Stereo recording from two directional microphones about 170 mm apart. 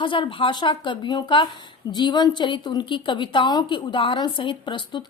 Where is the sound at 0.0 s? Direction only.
30° left (ahead or behind).